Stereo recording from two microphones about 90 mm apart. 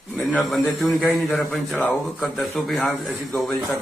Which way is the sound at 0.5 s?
Centre (ahead or behind).